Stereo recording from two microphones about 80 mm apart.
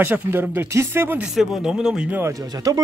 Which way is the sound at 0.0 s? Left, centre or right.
Right.